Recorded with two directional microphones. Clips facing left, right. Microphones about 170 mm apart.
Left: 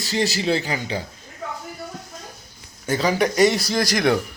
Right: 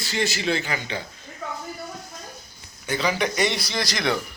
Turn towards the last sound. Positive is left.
turn(degrees=50)  # may be behind; listen again after turning